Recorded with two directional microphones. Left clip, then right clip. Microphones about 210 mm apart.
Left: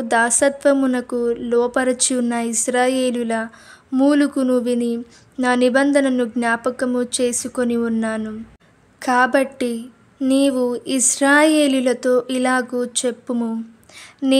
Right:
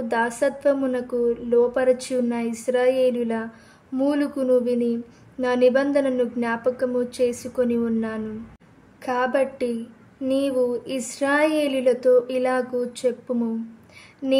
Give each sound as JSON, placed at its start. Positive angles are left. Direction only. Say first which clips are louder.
{"t": 0.1, "sound": "a woman's voice", "louder": "left 6 dB", "side_deg": 40}